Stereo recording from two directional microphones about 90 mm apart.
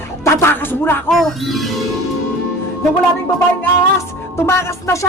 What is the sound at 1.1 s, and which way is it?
Speech, centre (ahead or behind).